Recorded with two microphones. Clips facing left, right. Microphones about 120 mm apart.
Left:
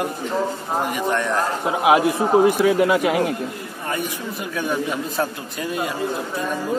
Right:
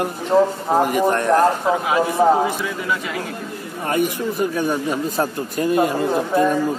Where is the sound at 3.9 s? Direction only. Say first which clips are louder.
Right 7 dB; 55° right (ahead or behind).